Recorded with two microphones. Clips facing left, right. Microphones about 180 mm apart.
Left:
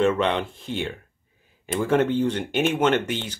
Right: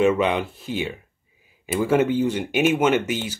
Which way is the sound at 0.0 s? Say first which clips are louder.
Right 2 dB; 10° right (ahead or behind).